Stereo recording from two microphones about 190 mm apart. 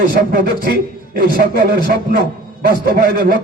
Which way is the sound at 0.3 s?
50° right (ahead or behind).